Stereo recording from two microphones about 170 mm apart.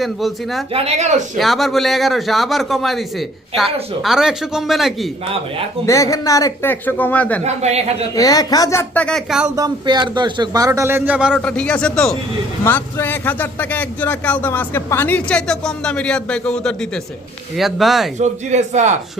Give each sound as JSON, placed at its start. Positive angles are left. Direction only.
{"t": 0.0, "sound": "a man's voice", "side_deg": 0}
{"t": 0.7, "sound": "speech", "side_deg": -35}
{"t": 1.4, "sound": "a man's voice", "side_deg": 0}
{"t": 5.8, "sound": "speech", "side_deg": 20}
{"t": 7.4, "sound": "speech", "side_deg": -40}
{"t": 8.1, "sound": "speech", "side_deg": 20}
{"t": 9.0, "sound": "a man's voice", "side_deg": 0}
{"t": 9.6, "sound": "a man's voice", "side_deg": -25}
{"t": 11.3, "sound": "a man's voice", "side_deg": 5}
{"t": 18.2, "sound": "speech", "side_deg": -45}